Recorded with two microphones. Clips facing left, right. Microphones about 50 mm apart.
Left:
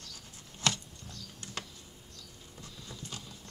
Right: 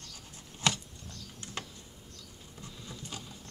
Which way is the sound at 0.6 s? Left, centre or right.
Centre.